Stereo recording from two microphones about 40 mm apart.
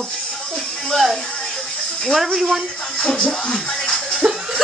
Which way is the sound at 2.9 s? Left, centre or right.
Left.